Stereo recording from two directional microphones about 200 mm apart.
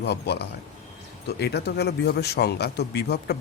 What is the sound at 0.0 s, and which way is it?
Speech, 55° left (ahead or behind).